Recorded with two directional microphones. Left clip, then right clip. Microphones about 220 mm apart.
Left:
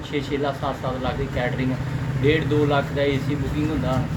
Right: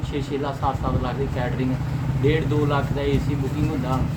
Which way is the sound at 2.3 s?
20° right (ahead or behind).